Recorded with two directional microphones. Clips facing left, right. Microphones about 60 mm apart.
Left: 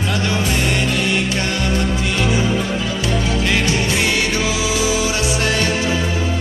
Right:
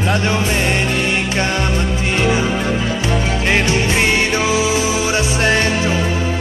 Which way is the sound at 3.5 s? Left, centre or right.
Right.